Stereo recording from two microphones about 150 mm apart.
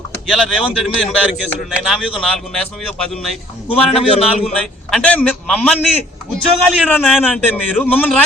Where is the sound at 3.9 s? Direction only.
40° left (ahead or behind).